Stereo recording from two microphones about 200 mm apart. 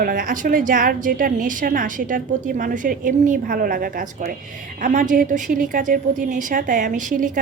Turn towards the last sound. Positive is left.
turn(degrees=-40)  # may be behind; listen again after turning